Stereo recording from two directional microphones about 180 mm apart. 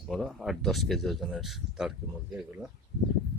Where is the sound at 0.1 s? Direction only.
Centre (ahead or behind).